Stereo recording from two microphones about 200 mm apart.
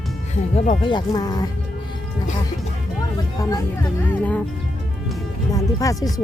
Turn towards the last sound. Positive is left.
turn(degrees=15)  # may be behind; listen again after turning